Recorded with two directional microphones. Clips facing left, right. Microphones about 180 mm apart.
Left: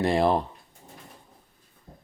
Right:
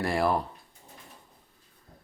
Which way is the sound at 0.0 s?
20° left (ahead or behind).